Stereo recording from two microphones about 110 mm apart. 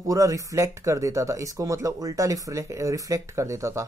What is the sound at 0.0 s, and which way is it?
Speech, 30° right (ahead or behind).